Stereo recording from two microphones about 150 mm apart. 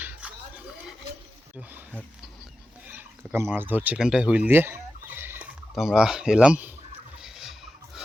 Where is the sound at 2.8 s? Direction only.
10° right (ahead or behind).